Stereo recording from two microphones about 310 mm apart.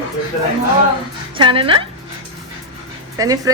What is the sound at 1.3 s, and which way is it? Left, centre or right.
Speech, centre.